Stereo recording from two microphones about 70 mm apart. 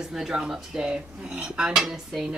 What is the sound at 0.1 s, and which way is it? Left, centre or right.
Speech, centre.